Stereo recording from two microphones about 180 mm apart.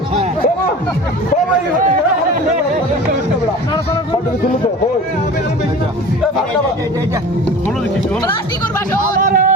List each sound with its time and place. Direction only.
9.2 s music: 50° right (ahead or behind)